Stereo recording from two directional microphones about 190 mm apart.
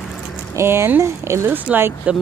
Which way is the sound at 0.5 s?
15° right (ahead or behind).